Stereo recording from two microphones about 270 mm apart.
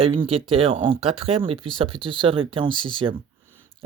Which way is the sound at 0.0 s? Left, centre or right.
Right.